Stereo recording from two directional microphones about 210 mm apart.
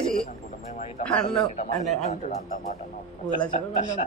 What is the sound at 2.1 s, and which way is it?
Speech, 35° left (ahead or behind).